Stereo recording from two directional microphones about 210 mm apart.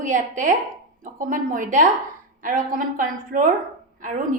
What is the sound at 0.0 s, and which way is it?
A woman's voice, 40° right (ahead or behind).